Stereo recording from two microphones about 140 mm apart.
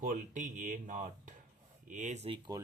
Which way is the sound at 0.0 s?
70° right (ahead or behind).